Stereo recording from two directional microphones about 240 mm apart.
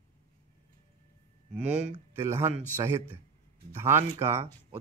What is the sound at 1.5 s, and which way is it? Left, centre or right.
Speech, right.